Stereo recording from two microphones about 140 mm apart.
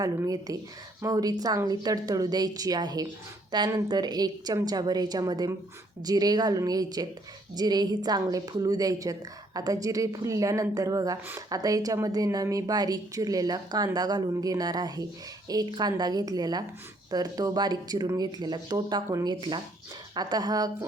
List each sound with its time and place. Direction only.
0.0 s a woman's voice: 25° right (ahead or behind)